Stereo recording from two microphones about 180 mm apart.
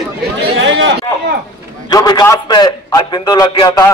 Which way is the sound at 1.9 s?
20° left (ahead or behind).